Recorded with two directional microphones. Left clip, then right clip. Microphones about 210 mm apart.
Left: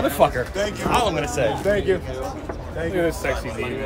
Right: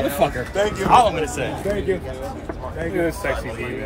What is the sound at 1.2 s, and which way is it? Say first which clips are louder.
Speech: left 3 dB; 45° left (ahead or behind).